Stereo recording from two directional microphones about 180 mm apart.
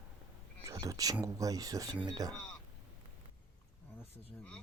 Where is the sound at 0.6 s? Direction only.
20° right (ahead or behind).